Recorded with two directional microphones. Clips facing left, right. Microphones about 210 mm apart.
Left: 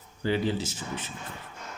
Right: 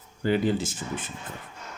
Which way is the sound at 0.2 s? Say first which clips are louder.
Right 3 dB; 50° right (ahead or behind).